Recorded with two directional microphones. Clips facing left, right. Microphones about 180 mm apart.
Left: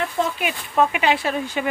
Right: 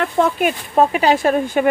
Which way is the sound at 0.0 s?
50° right (ahead or behind).